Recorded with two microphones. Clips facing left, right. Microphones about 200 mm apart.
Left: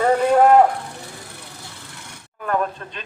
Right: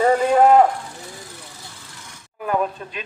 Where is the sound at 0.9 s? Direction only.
60° left (ahead or behind).